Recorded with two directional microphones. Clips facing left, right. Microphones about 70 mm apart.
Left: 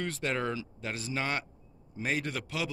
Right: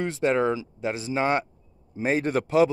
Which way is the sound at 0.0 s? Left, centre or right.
Right.